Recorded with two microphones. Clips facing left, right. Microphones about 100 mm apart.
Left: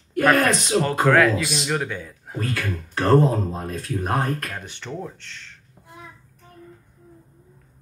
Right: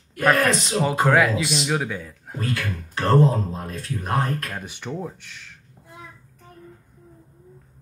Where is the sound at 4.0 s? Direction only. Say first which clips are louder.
Even; 45° left (ahead or behind).